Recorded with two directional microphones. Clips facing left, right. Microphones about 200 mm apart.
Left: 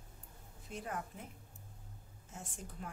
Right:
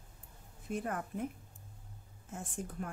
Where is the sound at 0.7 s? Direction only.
55° right (ahead or behind).